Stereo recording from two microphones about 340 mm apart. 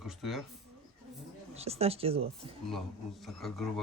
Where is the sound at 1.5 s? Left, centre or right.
Centre.